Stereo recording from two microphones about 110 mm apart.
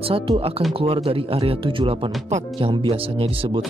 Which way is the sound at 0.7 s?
60° right (ahead or behind).